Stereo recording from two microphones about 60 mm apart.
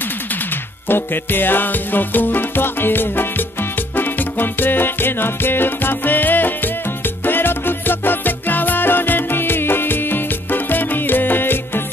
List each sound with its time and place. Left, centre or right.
0.8 s music: left